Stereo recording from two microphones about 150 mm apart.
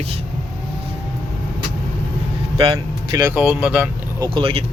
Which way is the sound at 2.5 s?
35° right (ahead or behind).